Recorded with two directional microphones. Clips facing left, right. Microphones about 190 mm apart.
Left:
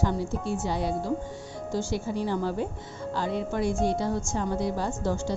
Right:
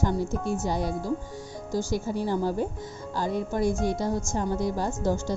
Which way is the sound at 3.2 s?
40° right (ahead or behind).